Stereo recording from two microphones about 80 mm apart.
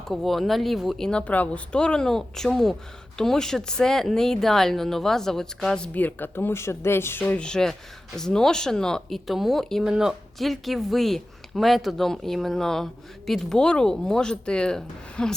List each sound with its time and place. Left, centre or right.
0.1 s speech: centre
5.9 s speech: left
7.4 s speech: centre